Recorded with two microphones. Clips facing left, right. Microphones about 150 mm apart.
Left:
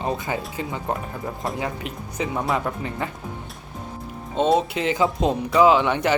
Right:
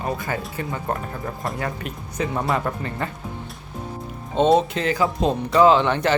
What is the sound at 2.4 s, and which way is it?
Speech, centre (ahead or behind).